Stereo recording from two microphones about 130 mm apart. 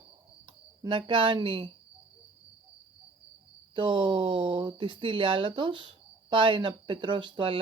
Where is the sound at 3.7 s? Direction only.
40° right (ahead or behind).